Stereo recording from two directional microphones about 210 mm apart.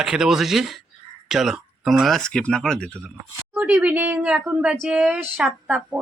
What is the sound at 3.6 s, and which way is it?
A woman's voice, 5° right (ahead or behind).